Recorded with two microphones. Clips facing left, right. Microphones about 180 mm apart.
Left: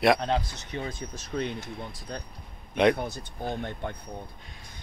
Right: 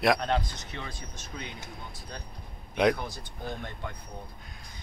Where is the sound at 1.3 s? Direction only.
45° left (ahead or behind).